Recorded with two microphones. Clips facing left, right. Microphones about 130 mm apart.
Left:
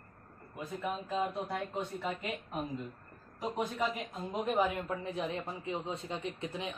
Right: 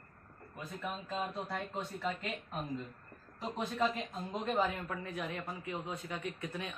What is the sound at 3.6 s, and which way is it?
Speech, 15° left (ahead or behind).